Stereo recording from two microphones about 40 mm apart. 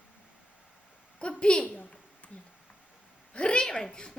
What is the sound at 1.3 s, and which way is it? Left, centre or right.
Speech, left.